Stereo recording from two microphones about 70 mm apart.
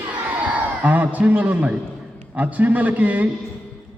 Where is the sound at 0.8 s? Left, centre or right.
Right.